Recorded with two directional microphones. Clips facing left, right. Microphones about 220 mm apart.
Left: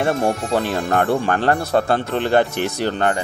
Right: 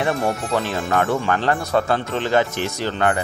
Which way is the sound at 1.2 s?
50° left (ahead or behind).